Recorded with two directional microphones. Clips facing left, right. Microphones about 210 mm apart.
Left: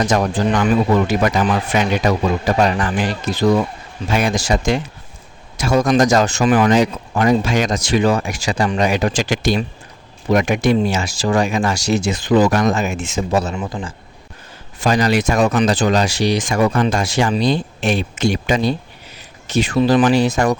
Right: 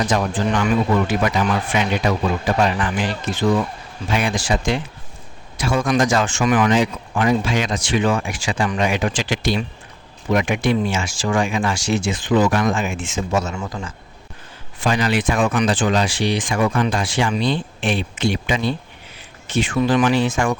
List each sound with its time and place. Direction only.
0.0 s speech: 45° left (ahead or behind)
13.6 s a man's voice: 20° left (ahead or behind)
14.8 s speech: 40° left (ahead or behind)